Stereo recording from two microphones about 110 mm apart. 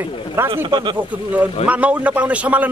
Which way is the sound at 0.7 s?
45° right (ahead or behind).